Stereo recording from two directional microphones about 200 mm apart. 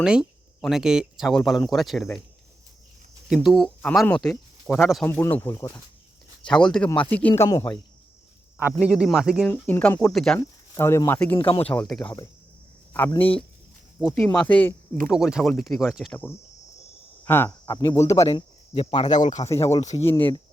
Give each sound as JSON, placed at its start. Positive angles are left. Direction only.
{"t": 0.0, "sound": "speech", "side_deg": -5}
{"t": 3.2, "sound": "speech", "side_deg": 0}
{"t": 5.0, "sound": "speech", "side_deg": 10}
{"t": 8.8, "sound": "speech", "side_deg": -5}
{"t": 9.5, "sound": "speech", "side_deg": 10}
{"t": 10.4, "sound": "speech", "side_deg": 15}
{"t": 12.0, "sound": "speech", "side_deg": 20}
{"t": 14.0, "sound": "speech", "side_deg": 10}
{"t": 15.0, "sound": "speech", "side_deg": 0}
{"t": 17.2, "sound": "speech", "side_deg": 10}